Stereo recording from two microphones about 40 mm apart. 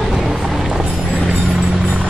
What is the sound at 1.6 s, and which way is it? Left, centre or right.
Music, centre.